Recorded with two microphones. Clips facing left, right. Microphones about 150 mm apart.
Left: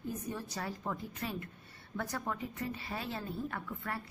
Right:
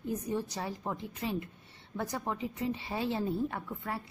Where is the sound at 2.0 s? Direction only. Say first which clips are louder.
Right 3 dB; 20° right (ahead or behind).